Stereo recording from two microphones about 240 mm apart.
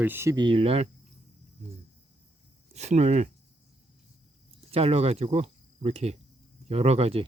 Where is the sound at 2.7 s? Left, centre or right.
Right.